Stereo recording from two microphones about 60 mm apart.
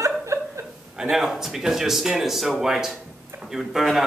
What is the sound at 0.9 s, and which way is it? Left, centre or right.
A man's voice, centre.